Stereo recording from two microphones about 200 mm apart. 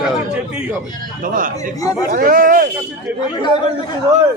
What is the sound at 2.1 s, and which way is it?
Speech, 45° right (ahead or behind).